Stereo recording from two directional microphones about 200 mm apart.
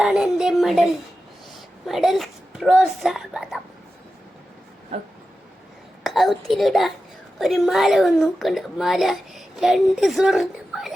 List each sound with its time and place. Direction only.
0.0 s a woman's voice: 5° right (ahead or behind)
4.9 s dog: 30° right (ahead or behind)
6.0 s a woman's voice: centre (ahead or behind)